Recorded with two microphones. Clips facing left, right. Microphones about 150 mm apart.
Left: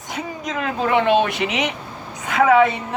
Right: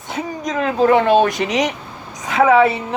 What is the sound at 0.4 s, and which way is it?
A woman's voice, 35° right (ahead or behind).